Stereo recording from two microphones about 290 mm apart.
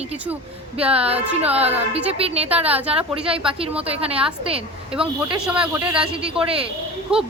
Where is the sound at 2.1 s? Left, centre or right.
Right.